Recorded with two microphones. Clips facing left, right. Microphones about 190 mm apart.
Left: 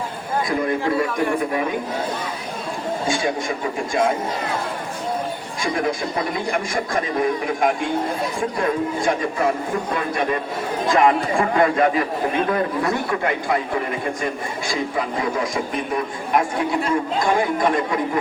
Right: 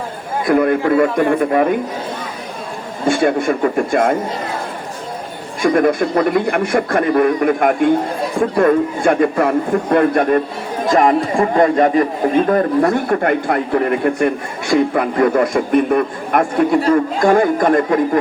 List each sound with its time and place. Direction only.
0.4 s a man's voice: 60° right (ahead or behind)
3.1 s a man's voice: 60° right (ahead or behind)
5.6 s a man's voice: 60° right (ahead or behind)
10.8 s a man's voice: 40° right (ahead or behind)